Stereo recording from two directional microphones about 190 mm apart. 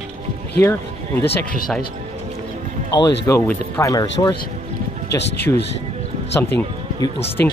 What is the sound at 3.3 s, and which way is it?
Speech, 15° left (ahead or behind).